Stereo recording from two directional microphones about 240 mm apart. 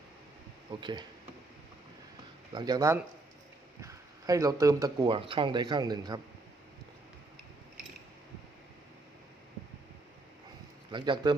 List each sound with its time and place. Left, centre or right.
0.8 s speech: centre
2.5 s speech: centre
10.9 s speech: centre